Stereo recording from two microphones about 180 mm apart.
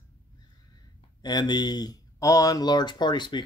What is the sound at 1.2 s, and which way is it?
Speech, 25° left (ahead or behind).